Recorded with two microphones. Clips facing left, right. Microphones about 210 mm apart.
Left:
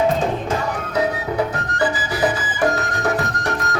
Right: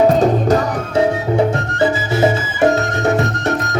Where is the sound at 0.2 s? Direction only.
40° right (ahead or behind).